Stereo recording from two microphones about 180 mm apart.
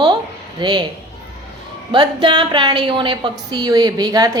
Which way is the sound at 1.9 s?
25° right (ahead or behind).